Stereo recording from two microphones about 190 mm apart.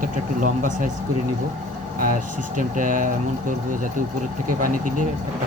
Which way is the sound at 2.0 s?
45° right (ahead or behind).